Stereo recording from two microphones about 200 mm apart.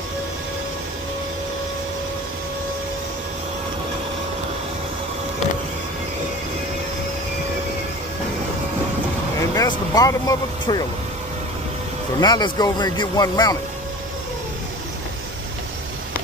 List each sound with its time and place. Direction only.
9.4 s speech: 20° left (ahead or behind)
12.2 s speech: 20° left (ahead or behind)